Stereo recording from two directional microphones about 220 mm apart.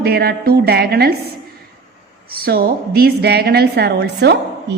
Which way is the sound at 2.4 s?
45° right (ahead or behind).